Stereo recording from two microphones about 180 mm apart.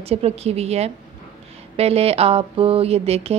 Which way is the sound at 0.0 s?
35° right (ahead or behind).